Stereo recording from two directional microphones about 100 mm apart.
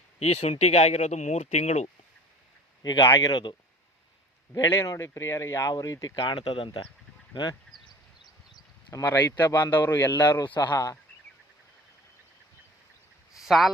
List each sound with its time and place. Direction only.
0.2 s speech: 90° left
2.8 s speech: 45° left (ahead or behind)
4.6 s speech: 30° left (ahead or behind)
6.1 s speech: 55° left (ahead or behind)
7.7 s a sound: 10° left (ahead or behind)
8.5 s a sound: 35° left (ahead or behind)
9.4 s speech: 30° left (ahead or behind)
10.2 s speech: 40° left (ahead or behind)
13.4 s speech: centre (ahead or behind)